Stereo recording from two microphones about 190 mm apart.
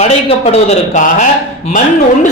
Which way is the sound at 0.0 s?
35° left (ahead or behind).